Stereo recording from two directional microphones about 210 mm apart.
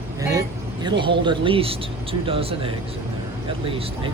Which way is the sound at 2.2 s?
25° right (ahead or behind).